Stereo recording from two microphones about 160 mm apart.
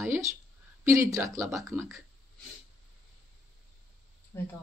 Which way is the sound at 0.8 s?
20° right (ahead or behind).